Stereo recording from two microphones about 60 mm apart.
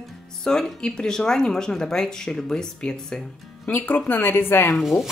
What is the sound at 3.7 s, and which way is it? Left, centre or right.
A woman's voice, left.